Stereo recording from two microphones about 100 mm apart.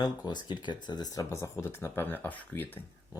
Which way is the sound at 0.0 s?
40° left (ahead or behind).